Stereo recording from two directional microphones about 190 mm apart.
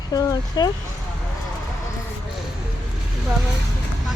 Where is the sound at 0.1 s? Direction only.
20° left (ahead or behind).